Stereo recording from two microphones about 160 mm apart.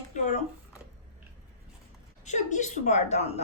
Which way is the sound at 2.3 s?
50° left (ahead or behind).